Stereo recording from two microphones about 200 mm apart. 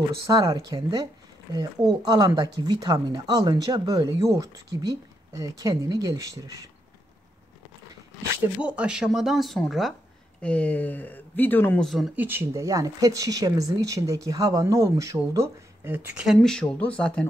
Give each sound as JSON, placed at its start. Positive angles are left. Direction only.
{"t": 0.3, "sound": "speech", "side_deg": -20}
{"t": 8.5, "sound": "speech", "side_deg": -5}
{"t": 12.2, "sound": "speech", "side_deg": -10}